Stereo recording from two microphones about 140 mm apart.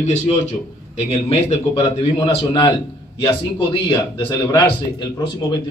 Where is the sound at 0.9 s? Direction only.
45° left (ahead or behind).